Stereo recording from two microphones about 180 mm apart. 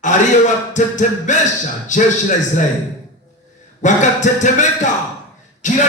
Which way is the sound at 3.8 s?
45° left (ahead or behind).